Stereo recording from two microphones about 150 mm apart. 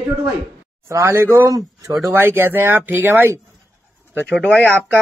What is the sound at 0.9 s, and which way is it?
Speech, 15° right (ahead or behind).